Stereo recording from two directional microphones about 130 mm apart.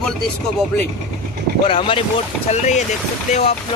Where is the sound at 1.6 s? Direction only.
45° left (ahead or behind).